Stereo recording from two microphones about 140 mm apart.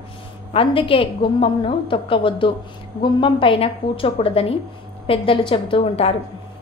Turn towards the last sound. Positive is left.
turn(degrees=45)  # may be behind; listen again after turning